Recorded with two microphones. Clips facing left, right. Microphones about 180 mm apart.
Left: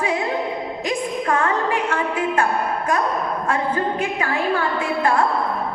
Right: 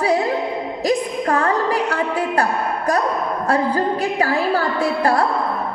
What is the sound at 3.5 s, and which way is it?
A woman's voice, 35° right (ahead or behind).